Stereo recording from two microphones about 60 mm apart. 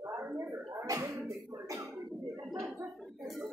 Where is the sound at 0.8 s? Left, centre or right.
Right.